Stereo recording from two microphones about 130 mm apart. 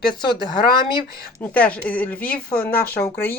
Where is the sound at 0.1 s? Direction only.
35° left (ahead or behind).